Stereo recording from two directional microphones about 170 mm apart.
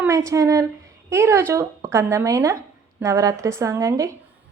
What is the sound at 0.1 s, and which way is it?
Speech, 20° right (ahead or behind).